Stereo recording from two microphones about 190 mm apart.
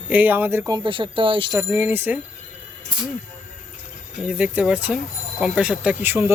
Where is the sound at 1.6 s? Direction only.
10° right (ahead or behind).